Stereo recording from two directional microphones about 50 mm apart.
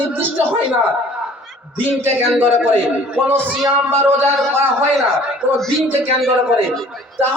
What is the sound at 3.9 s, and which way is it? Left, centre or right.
Music, right.